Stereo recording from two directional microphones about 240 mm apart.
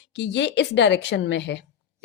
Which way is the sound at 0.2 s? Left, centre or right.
Left.